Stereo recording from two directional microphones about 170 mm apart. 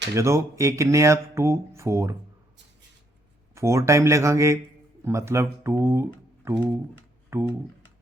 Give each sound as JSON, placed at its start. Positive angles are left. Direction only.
{"t": 0.1, "sound": "speech", "side_deg": -15}
{"t": 3.5, "sound": "speech", "side_deg": -15}